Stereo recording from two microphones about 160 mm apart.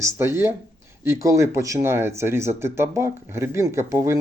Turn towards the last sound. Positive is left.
turn(degrees=-15)  # may be behind; listen again after turning